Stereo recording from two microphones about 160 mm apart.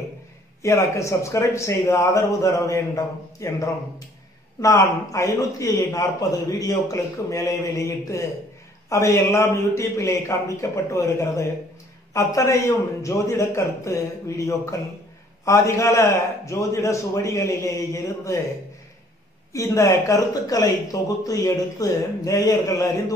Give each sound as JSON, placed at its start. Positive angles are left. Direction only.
{"t": 0.6, "sound": "a man's voice", "side_deg": 20}
{"t": 19.5, "sound": "a man's voice", "side_deg": 20}